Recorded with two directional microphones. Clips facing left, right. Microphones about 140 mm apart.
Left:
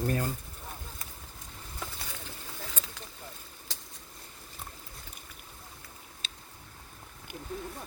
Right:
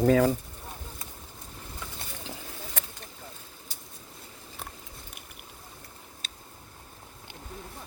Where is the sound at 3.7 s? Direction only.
90° left.